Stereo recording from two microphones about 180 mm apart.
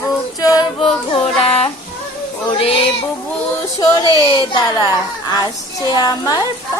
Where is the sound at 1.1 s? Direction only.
35° left (ahead or behind).